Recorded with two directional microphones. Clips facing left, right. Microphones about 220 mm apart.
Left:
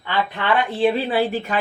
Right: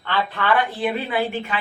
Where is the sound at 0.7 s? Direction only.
30° left (ahead or behind).